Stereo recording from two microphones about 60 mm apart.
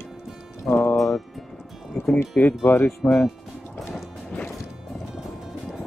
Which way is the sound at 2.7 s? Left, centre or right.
Left.